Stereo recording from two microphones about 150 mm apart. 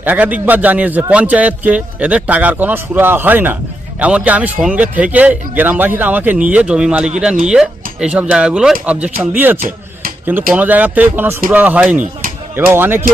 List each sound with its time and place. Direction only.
0.0 s speech: 10° right (ahead or behind)
9.6 s a sound: 70° right (ahead or behind)
10.5 s speech: 10° right (ahead or behind)